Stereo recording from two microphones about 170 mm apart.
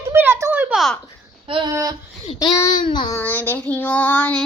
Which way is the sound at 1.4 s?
30° right (ahead or behind).